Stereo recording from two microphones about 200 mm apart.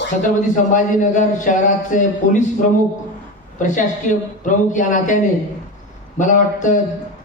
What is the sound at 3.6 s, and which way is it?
A man's voice, 40° left (ahead or behind).